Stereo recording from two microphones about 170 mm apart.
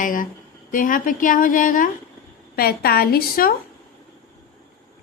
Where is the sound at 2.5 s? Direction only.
65° left (ahead or behind).